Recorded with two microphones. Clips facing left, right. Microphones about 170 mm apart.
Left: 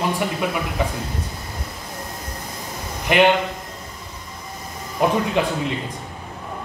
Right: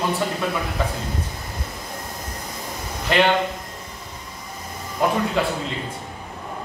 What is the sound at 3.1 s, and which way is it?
Speech, 15° left (ahead or behind).